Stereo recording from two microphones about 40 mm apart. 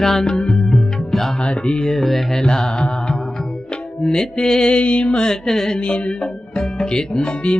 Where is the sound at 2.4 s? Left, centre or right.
Centre.